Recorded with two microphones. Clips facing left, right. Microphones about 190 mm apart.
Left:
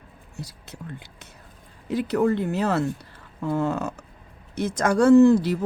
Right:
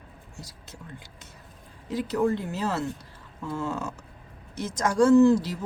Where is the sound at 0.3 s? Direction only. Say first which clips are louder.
Left 7 dB; 60° left (ahead or behind).